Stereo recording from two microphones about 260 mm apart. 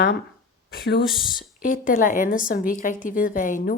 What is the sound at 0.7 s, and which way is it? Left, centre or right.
A woman's voice, left.